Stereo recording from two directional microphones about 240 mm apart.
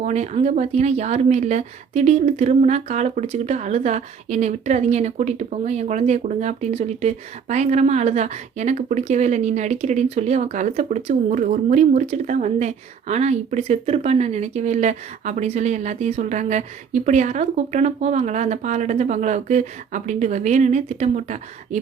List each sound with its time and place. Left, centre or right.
0.0 s speech: right